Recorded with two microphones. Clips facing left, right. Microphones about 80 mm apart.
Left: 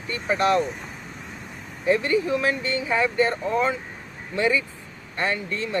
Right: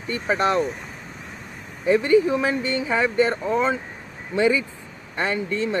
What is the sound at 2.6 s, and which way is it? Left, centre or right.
Speech, right.